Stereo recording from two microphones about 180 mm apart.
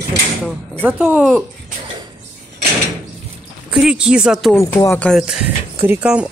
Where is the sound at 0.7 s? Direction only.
10° right (ahead or behind).